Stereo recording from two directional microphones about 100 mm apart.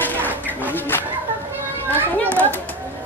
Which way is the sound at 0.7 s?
20° left (ahead or behind).